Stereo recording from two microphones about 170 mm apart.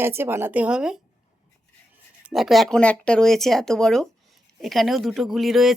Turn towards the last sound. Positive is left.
turn(degrees=0)  # may be behind; listen again after turning